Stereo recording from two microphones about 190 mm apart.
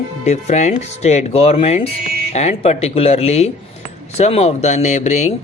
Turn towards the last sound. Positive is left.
turn(degrees=35)  # may be behind; listen again after turning